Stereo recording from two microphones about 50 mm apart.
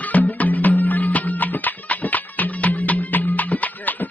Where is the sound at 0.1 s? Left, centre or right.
Left.